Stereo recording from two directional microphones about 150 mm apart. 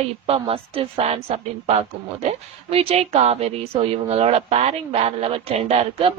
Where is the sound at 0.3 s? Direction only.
40° right (ahead or behind).